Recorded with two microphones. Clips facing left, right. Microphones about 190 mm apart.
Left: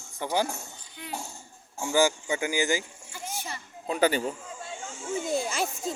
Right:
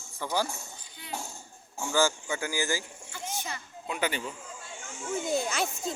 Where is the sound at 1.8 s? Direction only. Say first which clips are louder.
Left 3 dB; 15° left (ahead or behind).